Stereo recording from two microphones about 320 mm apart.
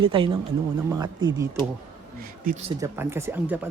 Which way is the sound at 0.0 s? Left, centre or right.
Centre.